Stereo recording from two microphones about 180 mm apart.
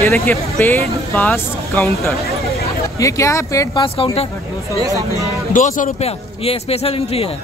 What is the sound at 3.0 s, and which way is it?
Speech, 15° left (ahead or behind).